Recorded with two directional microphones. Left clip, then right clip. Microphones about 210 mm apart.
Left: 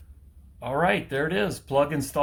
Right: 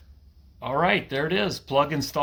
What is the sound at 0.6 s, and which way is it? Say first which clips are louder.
Speech: right 1 dB; 15° right (ahead or behind).